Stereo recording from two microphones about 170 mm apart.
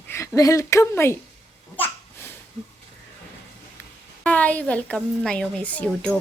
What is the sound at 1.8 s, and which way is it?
Babbling, 10° left (ahead or behind).